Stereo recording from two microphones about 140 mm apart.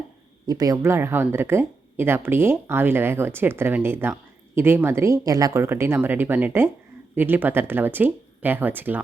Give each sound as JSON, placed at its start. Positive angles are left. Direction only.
{"t": 0.4, "sound": "speech", "side_deg": -25}